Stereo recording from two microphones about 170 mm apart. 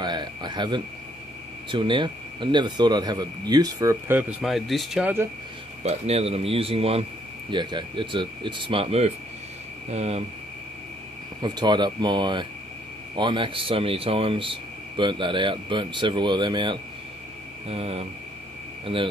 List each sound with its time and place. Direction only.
0.0 s a sound: 25° right (ahead or behind)
1.7 s speech: 30° right (ahead or behind); by 5.3 s 10° right (ahead or behind)
5.9 s speech: 40° right (ahead or behind)
11.4 s speech: 25° right (ahead or behind)